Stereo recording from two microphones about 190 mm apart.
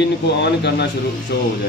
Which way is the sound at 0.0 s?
65° left (ahead or behind).